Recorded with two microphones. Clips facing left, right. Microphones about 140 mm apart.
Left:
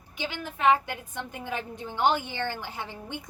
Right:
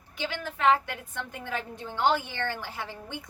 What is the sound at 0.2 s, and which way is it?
A woman's voice, 15° left (ahead or behind).